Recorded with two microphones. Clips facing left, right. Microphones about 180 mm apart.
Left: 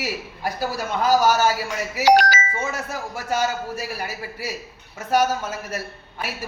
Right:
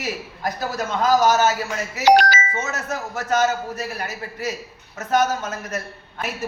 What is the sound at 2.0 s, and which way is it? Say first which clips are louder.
Music: right 1 dB; 60° right (ahead or behind).